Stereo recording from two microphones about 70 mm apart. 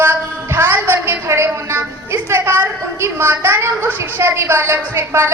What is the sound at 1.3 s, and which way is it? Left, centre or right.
A woman's voice, right.